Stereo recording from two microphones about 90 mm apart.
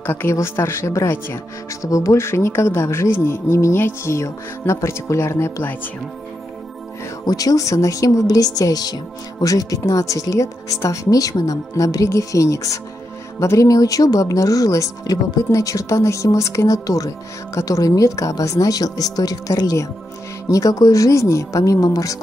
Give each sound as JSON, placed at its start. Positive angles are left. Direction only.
{"t": 0.0, "sound": "speech", "side_deg": 25}
{"t": 7.2, "sound": "speech", "side_deg": 45}